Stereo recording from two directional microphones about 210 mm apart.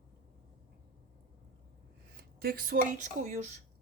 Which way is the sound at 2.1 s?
45° right (ahead or behind).